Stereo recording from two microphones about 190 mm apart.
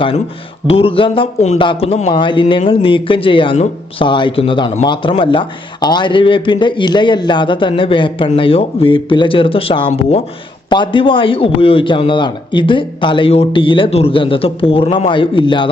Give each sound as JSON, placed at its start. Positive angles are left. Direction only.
{"t": 0.7, "sound": "a man's voice", "side_deg": 30}